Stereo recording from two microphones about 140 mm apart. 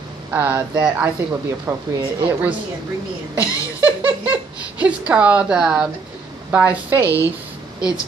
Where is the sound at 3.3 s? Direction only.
10° right (ahead or behind).